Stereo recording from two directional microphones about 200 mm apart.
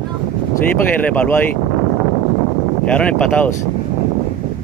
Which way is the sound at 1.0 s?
5° left (ahead or behind).